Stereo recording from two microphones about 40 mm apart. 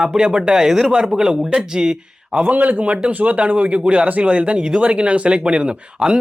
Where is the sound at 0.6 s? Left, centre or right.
Centre.